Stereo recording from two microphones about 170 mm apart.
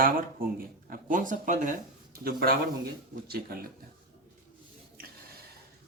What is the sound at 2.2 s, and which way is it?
Speech, 60° right (ahead or behind).